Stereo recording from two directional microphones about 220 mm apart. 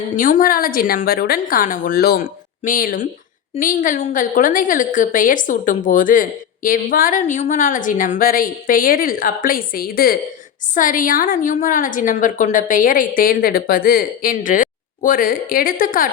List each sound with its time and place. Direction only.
0.2 s a woman's voice: 35° left (ahead or behind)